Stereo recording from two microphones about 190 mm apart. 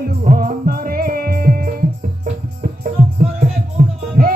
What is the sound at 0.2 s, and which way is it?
Music, 50° right (ahead or behind).